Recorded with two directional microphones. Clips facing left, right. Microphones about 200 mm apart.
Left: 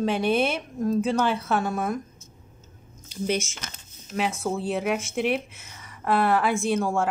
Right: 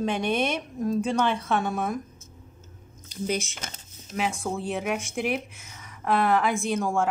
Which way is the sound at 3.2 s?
Centre (ahead or behind).